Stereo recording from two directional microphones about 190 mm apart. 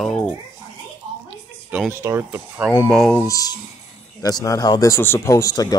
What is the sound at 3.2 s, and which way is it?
Speech, 20° left (ahead or behind).